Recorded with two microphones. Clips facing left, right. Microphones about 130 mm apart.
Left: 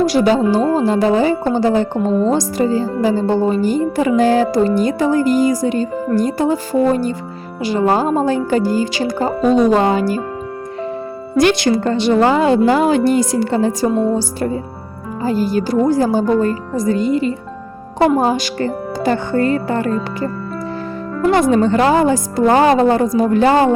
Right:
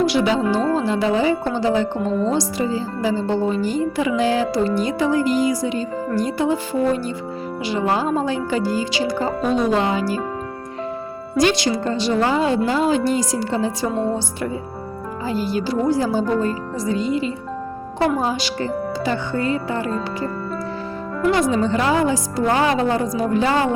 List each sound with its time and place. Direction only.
0.0 s a woman's voice: 40° left (ahead or behind)
11.3 s a woman's voice: 55° left (ahead or behind)
15.2 s a woman's voice: 45° left (ahead or behind)
21.2 s a woman's voice: 55° left (ahead or behind)